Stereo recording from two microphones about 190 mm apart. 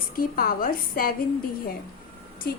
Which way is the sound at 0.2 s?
50° left (ahead or behind).